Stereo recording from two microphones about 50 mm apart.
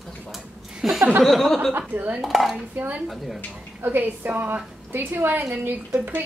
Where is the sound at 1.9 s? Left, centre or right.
Right.